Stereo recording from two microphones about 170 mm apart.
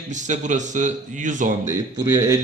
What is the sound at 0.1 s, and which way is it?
A man's voice, 45° right (ahead or behind).